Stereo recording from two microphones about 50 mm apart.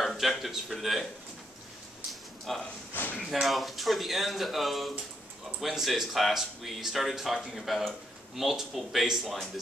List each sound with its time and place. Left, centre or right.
0.0 s speech: centre
2.0 s a sound: centre
2.9 s speech: left
3.3 s speech: centre